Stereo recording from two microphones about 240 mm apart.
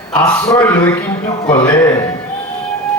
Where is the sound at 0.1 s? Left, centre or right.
Centre.